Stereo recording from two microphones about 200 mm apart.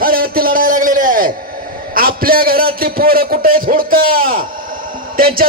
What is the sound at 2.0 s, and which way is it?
A man's voice, 45° right (ahead or behind).